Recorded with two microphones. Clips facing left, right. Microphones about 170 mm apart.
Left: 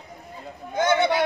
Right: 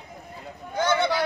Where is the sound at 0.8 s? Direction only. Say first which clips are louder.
Left 3 dB; 20° left (ahead or behind).